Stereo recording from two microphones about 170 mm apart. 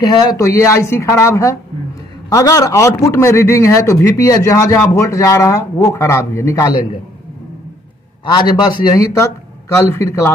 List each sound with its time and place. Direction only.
0.0 s a man's voice: 25° left (ahead or behind)
8.3 s a man's voice: 25° left (ahead or behind)